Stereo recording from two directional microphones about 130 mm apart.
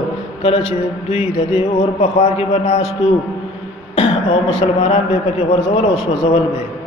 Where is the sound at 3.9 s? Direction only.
45° left (ahead or behind).